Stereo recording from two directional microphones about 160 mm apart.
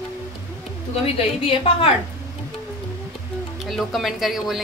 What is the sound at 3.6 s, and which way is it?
A woman's voice, centre (ahead or behind).